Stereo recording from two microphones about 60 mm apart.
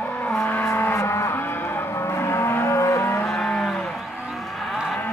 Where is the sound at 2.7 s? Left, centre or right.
Left.